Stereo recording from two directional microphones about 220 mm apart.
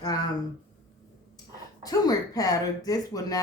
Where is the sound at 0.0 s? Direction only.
15° left (ahead or behind).